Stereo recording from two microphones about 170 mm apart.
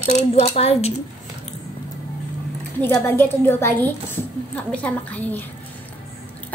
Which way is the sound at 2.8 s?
10° left (ahead or behind).